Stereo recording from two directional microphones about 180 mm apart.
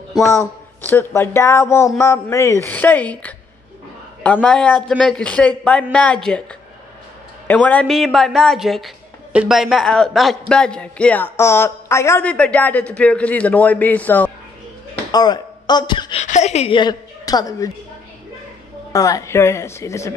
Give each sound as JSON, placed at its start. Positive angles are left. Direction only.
{"t": 0.3, "sound": "a man's voice", "side_deg": 15}
{"t": 7.4, "sound": "a man's voice", "side_deg": 10}
{"t": 15.0, "sound": "speech", "side_deg": 20}
{"t": 16.2, "sound": "a woman's voice", "side_deg": 40}
{"t": 18.9, "sound": "a man's voice", "side_deg": 20}